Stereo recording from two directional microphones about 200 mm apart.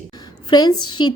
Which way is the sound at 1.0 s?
25° left (ahead or behind).